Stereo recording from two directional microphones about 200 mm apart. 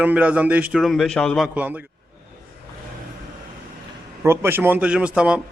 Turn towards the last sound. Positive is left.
turn(degrees=-5)  # may be behind; listen again after turning